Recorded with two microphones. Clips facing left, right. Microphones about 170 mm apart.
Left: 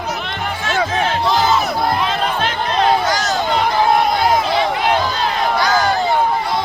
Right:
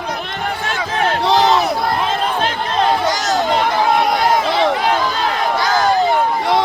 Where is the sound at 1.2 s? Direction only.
70° right (ahead or behind).